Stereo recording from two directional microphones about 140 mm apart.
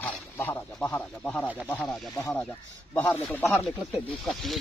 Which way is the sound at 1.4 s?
10° right (ahead or behind).